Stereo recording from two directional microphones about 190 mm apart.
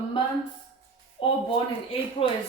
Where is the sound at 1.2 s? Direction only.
30° left (ahead or behind).